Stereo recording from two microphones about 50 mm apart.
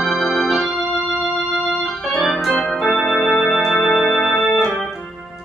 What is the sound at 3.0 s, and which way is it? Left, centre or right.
Music, centre.